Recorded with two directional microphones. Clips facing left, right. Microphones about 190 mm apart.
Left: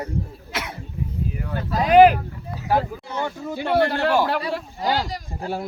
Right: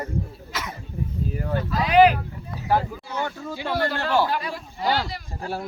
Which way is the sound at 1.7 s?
45° left (ahead or behind).